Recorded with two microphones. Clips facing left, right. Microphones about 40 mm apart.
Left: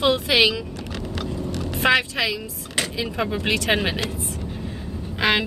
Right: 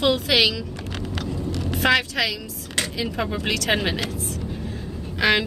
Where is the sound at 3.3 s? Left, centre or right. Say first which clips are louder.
Left 2 dB; left.